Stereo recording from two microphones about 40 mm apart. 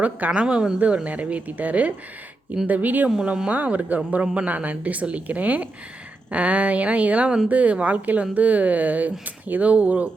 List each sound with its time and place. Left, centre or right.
0.3 s a woman's voice: right
1.0 s speech: right
3.2 s a woman's voice: right
3.5 s speech: right